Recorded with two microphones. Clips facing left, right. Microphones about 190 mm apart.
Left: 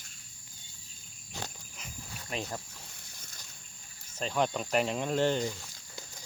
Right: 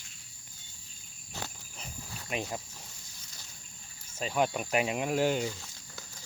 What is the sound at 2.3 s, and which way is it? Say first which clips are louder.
Speech: right 2 dB; 15° right (ahead or behind).